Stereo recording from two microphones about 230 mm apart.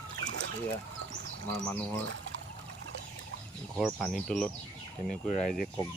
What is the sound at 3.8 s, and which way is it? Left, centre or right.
Speech, centre.